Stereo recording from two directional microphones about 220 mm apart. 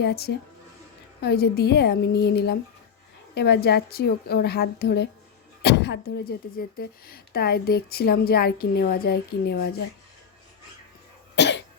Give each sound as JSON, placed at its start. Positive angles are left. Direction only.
{"t": 0.0, "sound": "speech", "side_deg": 50}
{"t": 11.3, "sound": "cough", "side_deg": 50}